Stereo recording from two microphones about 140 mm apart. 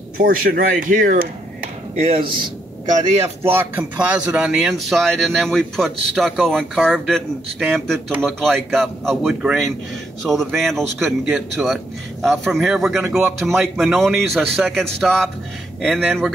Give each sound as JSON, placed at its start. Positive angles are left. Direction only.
{"t": 0.2, "sound": "speech", "side_deg": -90}
{"t": 2.2, "sound": "a man's voice", "side_deg": -35}
{"t": 3.0, "sound": "speech", "side_deg": -20}